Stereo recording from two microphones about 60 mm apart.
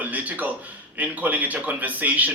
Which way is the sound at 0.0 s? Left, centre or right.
Right.